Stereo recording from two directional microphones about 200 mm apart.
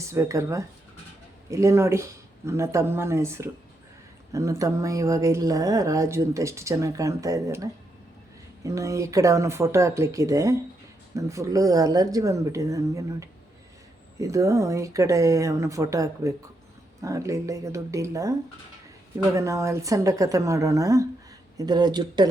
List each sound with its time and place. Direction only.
0.1 s speech: 15° right (ahead or behind)